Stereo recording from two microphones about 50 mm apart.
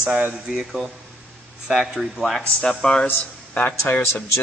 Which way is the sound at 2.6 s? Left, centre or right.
Centre.